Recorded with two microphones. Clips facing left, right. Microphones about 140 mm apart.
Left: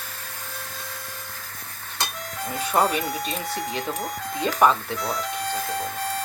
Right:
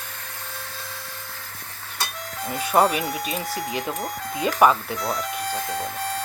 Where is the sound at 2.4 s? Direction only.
Centre (ahead or behind).